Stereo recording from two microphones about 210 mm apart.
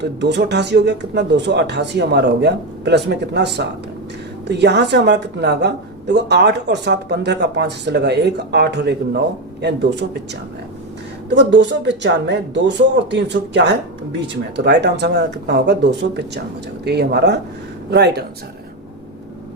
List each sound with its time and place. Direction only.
0.0 s a woman's voice: 55° right (ahead or behind)
11.3 s a woman's voice: 55° right (ahead or behind)